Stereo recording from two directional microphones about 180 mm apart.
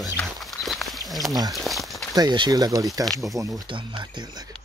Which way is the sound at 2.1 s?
25° right (ahead or behind).